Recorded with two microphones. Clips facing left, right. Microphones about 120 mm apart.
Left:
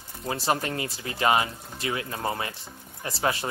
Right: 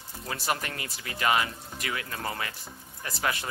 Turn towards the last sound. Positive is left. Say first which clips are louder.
# left 4 dB
turn(degrees=30)  # may be behind; listen again after turning